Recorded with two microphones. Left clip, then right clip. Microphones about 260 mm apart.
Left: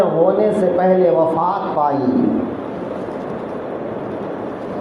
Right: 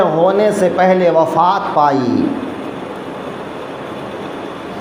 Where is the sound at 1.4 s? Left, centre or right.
Right.